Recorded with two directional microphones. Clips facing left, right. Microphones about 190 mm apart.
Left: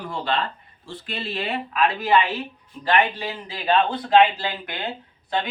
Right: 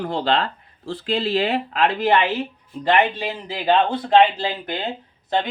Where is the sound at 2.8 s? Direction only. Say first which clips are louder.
Right 3 dB; 25° right (ahead or behind).